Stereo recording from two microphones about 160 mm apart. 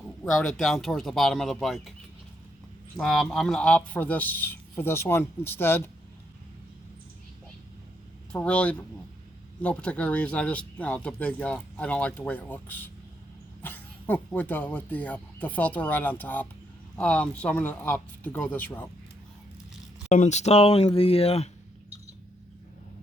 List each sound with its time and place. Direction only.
0.3 s speech: 5° left (ahead or behind)
3.0 s speech: centre (ahead or behind)
8.3 s speech: 5° left (ahead or behind)
20.1 s speech: 45° left (ahead or behind)